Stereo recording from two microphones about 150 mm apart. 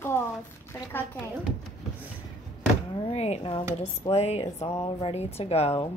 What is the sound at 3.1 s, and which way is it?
A woman's voice, 45° left (ahead or behind).